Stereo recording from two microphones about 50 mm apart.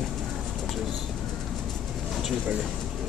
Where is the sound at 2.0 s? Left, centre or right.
Centre.